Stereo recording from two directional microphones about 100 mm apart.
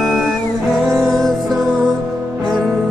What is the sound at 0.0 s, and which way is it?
Music, centre (ahead or behind).